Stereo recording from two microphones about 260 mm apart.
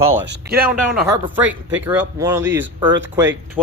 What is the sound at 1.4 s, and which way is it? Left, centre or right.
Speech, centre.